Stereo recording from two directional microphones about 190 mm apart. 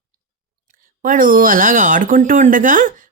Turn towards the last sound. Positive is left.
turn(degrees=-45)  # may be behind; listen again after turning